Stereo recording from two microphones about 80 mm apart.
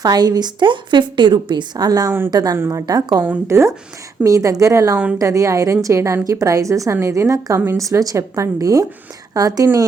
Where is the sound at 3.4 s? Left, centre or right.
Right.